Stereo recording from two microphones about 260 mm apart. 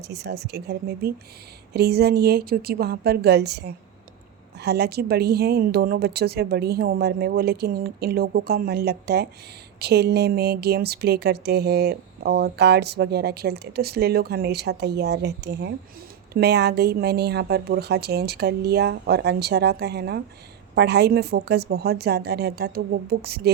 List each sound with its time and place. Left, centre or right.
0.0 s speech: right